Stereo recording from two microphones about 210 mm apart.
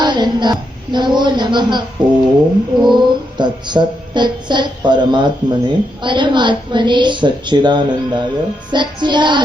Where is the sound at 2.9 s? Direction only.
20° right (ahead or behind).